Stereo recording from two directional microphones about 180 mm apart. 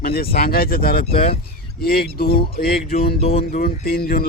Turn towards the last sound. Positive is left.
turn(degrees=55)  # may be behind; listen again after turning